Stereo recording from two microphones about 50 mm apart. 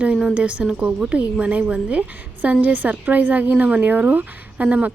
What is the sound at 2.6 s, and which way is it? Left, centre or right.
Speech, right.